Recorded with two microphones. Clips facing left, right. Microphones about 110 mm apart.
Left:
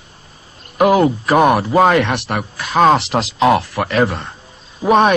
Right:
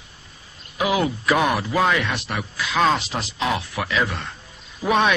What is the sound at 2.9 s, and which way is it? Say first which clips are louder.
Speech: left 9 dB; 70° left (ahead or behind).